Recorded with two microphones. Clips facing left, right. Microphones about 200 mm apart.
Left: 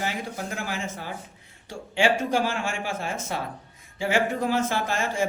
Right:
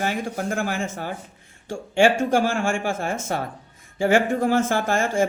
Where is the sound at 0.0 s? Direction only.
50° right (ahead or behind).